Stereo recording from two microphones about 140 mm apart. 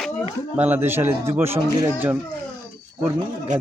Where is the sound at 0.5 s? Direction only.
15° right (ahead or behind).